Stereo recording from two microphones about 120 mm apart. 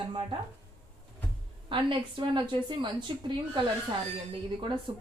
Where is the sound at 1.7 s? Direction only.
45° right (ahead or behind).